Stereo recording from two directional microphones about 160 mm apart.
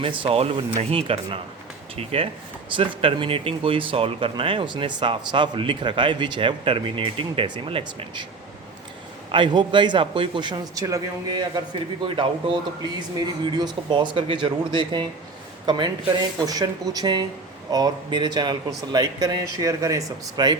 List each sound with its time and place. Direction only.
0.0 s speech: 35° right (ahead or behind)
9.3 s a man's voice: 30° right (ahead or behind)
16.4 s a man's voice: 25° right (ahead or behind)